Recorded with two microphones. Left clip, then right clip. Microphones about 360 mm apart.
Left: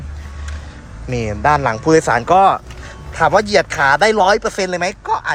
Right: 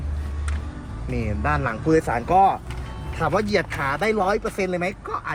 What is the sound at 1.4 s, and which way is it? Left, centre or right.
Speech, centre.